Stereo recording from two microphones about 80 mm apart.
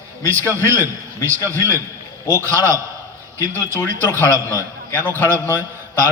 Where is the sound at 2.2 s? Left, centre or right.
Left.